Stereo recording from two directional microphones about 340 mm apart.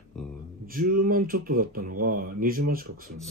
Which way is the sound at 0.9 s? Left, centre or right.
Right.